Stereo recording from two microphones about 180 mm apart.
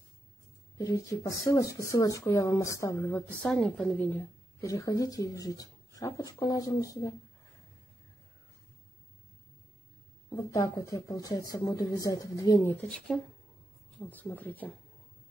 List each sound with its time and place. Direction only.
0.7 s speech: 20° left (ahead or behind)
10.3 s speech: 20° left (ahead or behind)
12.8 s speech: 5° left (ahead or behind)